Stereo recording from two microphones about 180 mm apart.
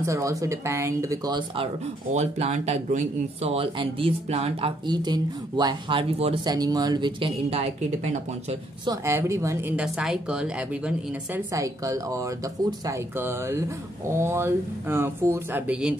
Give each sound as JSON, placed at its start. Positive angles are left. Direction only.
{"t": 0.0, "sound": "speech", "side_deg": -15}
{"t": 2.1, "sound": "speech", "side_deg": -40}
{"t": 6.4, "sound": "speech", "side_deg": -20}
{"t": 8.8, "sound": "speech", "side_deg": -20}
{"t": 11.5, "sound": "speech", "side_deg": -20}